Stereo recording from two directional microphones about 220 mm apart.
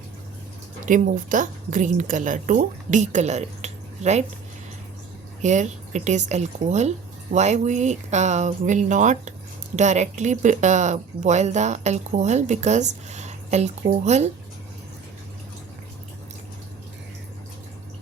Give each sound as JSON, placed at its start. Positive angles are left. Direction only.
{"t": 0.9, "sound": "a woman's voice", "side_deg": -35}
{"t": 5.4, "sound": "speech", "side_deg": -35}